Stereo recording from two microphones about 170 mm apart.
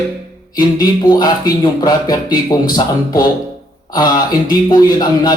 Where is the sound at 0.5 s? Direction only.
25° left (ahead or behind).